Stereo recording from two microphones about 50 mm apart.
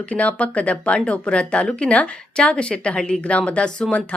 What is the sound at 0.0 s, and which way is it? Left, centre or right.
A woman's voice, left.